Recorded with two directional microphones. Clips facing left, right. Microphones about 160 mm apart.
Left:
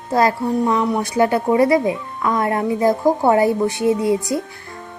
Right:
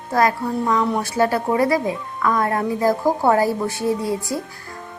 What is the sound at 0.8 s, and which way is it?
Speech, 15° left (ahead or behind).